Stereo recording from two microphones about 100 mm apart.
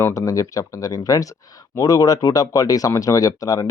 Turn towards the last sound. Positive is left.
turn(degrees=35)  # may be behind; listen again after turning